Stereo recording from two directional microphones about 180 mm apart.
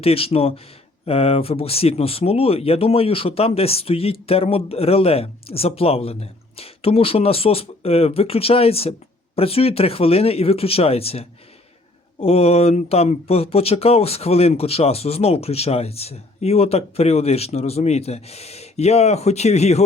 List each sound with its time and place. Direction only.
0.0 s speech: 30° left (ahead or behind)